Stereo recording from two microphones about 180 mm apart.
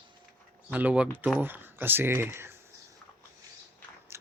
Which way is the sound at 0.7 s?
10° right (ahead or behind).